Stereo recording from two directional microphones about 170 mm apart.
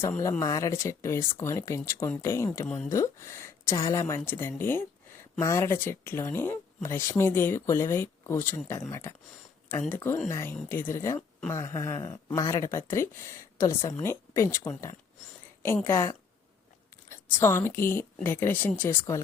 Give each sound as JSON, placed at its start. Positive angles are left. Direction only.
{"t": 0.0, "sound": "speech", "side_deg": 15}
{"t": 17.4, "sound": "speech", "side_deg": 15}